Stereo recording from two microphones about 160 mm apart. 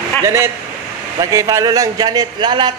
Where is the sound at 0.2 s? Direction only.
15° right (ahead or behind).